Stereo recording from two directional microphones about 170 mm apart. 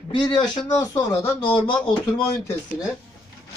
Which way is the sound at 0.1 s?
30° left (ahead or behind).